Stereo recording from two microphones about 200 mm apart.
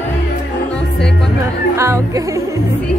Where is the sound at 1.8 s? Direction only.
15° right (ahead or behind).